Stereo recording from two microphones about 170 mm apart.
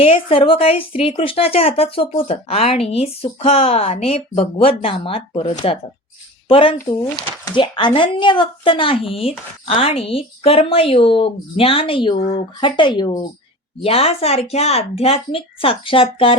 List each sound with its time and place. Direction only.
0.0 s a woman's voice: 35° left (ahead or behind)